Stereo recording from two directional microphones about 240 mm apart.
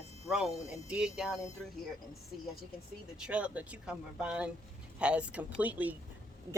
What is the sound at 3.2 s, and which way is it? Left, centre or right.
Speech, centre.